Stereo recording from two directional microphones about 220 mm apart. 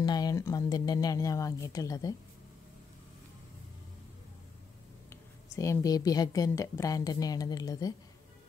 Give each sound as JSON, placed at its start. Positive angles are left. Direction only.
{"t": 0.0, "sound": "speech", "side_deg": 20}
{"t": 5.1, "sound": "speech", "side_deg": 15}